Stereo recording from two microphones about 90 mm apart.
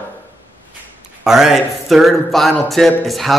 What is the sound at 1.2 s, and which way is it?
A man's voice, 5° right (ahead or behind).